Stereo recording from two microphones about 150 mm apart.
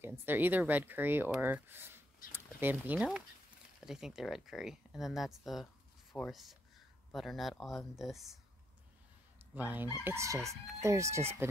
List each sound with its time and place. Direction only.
0.0 s speech: 15° right (ahead or behind)
9.6 s speech: 10° right (ahead or behind)
10.0 s chicken: 20° right (ahead or behind)